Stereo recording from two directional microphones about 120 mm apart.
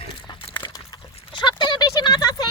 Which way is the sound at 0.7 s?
40° left (ahead or behind).